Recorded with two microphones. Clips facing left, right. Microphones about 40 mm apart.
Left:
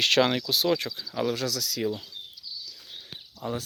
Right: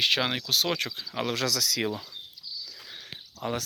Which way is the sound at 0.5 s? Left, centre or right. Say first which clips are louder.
Left 2 dB; right.